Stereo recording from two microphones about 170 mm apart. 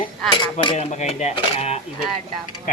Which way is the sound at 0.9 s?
45° left (ahead or behind).